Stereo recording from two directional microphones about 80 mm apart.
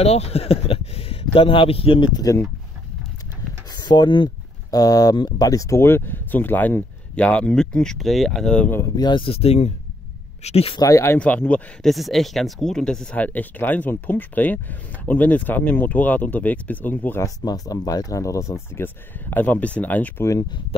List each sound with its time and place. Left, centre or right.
1.3 s speech: left
3.7 s speech: left
4.6 s speech: left
5.9 s speech: left; by 8.5 s centre
8.5 s speech: left
8.9 s speech: left
10.8 s speech: left
11.1 s speech: centre
11.8 s speech: centre
13.2 s speech: left
17.5 s speech: left
19.3 s speech: centre